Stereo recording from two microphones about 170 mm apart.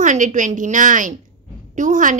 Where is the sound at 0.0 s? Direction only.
50° right (ahead or behind).